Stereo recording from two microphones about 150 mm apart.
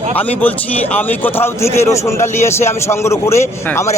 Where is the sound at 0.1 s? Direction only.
10° left (ahead or behind).